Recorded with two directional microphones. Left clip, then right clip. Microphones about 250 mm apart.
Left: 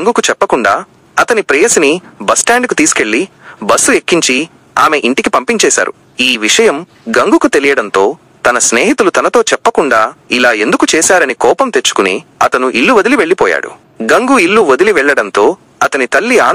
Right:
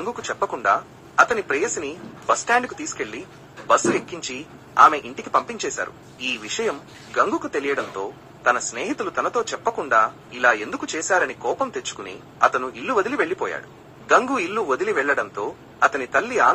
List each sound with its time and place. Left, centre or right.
0.0 s speech: left